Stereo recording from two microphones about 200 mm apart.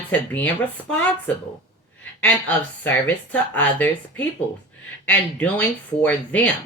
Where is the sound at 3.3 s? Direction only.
5° left (ahead or behind).